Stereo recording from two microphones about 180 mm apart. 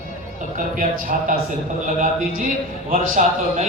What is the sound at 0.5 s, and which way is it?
A man's voice, 50° right (ahead or behind).